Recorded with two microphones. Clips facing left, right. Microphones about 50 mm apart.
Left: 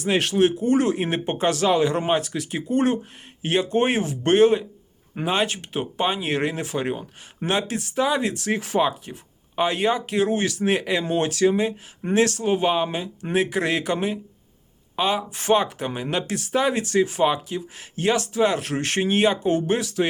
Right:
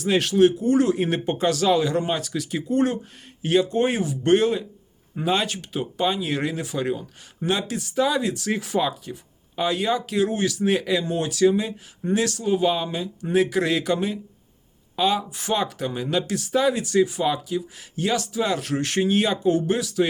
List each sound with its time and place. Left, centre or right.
0.0 s speech: left
15.3 s speech: left
15.6 s speech: left